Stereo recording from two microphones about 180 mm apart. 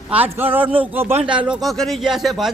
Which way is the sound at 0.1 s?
10° right (ahead or behind).